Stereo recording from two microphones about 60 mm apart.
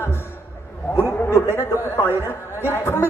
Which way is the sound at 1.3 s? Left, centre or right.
Left.